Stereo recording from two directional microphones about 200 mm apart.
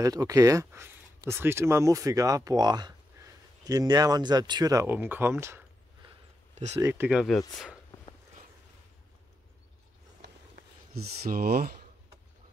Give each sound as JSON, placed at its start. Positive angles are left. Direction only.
{"t": 0.0, "sound": "speech", "side_deg": -15}
{"t": 6.0, "sound": "a sound", "side_deg": -35}
{"t": 6.8, "sound": "speech", "side_deg": -10}
{"t": 11.0, "sound": "speech", "side_deg": -50}